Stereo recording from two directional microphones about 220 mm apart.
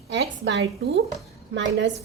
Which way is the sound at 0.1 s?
55° right (ahead or behind).